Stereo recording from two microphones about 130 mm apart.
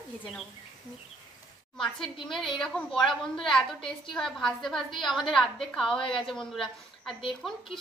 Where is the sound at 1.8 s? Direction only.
Centre (ahead or behind).